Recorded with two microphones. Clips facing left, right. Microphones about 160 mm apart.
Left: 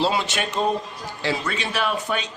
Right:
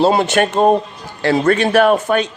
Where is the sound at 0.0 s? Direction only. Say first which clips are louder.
Right 10 dB; 50° right (ahead or behind).